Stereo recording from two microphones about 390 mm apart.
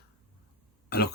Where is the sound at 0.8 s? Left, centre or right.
Left.